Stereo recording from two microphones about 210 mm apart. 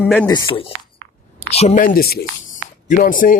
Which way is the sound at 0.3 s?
20° left (ahead or behind).